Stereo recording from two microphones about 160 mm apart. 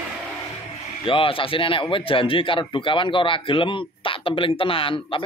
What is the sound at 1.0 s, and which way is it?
A man's voice, 35° left (ahead or behind).